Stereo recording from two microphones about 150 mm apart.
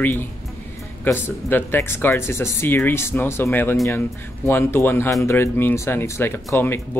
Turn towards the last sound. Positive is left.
turn(degrees=15)  # may be behind; listen again after turning